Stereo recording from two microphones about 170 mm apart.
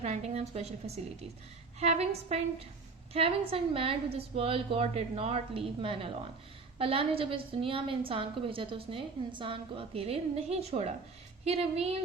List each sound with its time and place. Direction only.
0.0 s a woman's voice: 40° right (ahead or behind)